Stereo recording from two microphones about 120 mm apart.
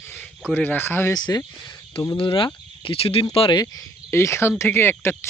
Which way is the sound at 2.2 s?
45° left (ahead or behind).